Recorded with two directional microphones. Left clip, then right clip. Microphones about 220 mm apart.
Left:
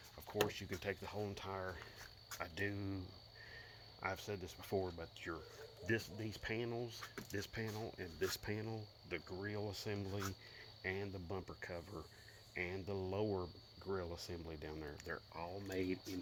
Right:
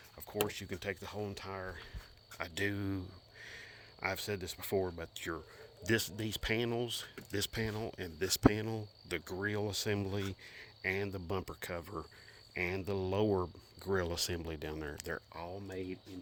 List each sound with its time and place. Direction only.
0.3 s speech: 35° right (ahead or behind)
2.4 s speech: 45° right (ahead or behind)
4.0 s speech: 45° right (ahead or behind)
9.0 s speech: 50° right (ahead or behind)
15.3 s speech: 55° right (ahead or behind)
15.7 s speech: 15° right (ahead or behind)